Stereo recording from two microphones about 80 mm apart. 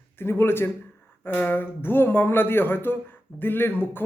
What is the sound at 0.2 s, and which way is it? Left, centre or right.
A man's voice, left.